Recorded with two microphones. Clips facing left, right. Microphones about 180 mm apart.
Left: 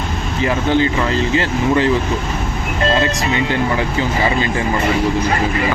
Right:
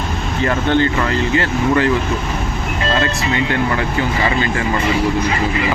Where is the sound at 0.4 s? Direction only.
10° left (ahead or behind).